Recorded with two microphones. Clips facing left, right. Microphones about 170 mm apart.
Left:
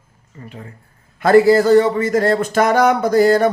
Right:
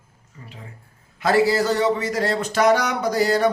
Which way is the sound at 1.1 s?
50° left (ahead or behind).